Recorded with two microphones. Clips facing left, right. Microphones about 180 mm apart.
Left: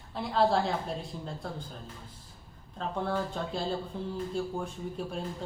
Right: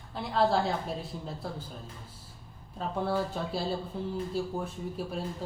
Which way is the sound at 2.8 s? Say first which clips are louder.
Right 1 dB; 10° right (ahead or behind).